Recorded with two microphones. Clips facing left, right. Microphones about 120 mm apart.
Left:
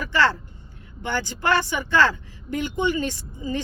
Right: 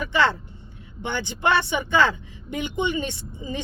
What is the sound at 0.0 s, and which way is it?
Vehicle, 20° right (ahead or behind).